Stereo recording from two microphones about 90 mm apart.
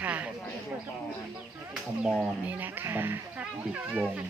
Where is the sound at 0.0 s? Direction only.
20° right (ahead or behind).